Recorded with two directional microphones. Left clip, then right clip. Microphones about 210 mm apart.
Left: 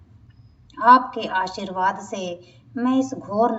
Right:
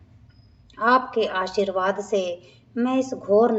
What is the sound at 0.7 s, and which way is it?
A woman's voice, 40° right (ahead or behind).